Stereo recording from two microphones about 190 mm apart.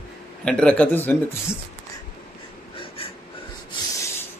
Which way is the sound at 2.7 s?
30° left (ahead or behind).